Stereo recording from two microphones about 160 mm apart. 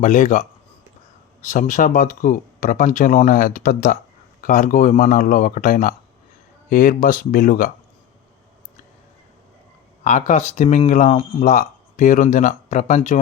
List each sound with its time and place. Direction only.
0.0 s speech: 50° left (ahead or behind)
1.5 s speech: 55° left (ahead or behind)
10.0 s speech: 50° left (ahead or behind)